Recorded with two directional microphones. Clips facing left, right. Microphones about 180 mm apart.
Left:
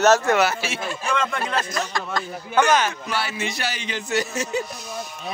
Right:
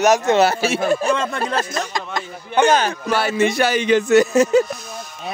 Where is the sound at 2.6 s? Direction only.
30° right (ahead or behind).